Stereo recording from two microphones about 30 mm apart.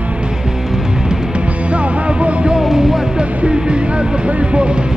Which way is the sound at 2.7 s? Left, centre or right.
Centre.